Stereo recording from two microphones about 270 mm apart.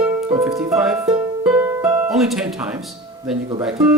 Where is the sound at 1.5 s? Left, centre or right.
Centre.